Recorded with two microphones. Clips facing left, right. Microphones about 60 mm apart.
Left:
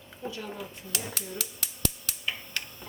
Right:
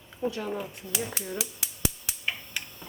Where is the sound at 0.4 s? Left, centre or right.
Right.